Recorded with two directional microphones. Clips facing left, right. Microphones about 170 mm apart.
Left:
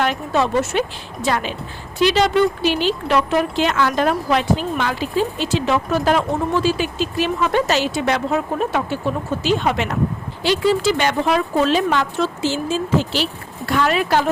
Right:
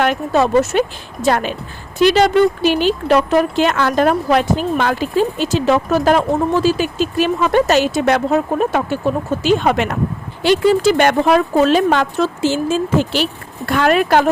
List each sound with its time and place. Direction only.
0.0 s speech: 50° right (ahead or behind)